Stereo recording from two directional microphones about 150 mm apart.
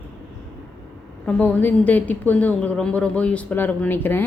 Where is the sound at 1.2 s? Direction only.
10° left (ahead or behind).